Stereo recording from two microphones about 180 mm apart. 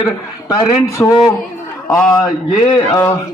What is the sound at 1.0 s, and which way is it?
Speech, 10° left (ahead or behind).